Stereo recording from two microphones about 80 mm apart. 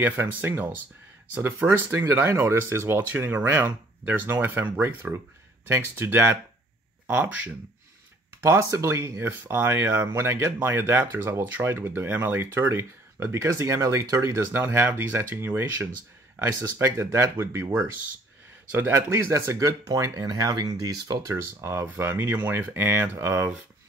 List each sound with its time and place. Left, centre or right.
0.0 s speech: right
8.4 s speech: right
9.3 s speech: right
18.7 s speech: right
21.5 s speech: right